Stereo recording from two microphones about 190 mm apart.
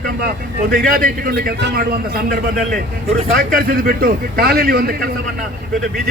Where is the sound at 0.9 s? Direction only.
50° right (ahead or behind).